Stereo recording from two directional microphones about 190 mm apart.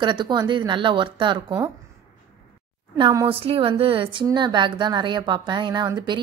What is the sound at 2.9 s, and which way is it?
A woman's voice, 25° right (ahead or behind).